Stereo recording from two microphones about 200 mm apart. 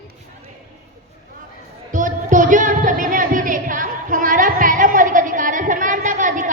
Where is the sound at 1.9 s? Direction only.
40° right (ahead or behind).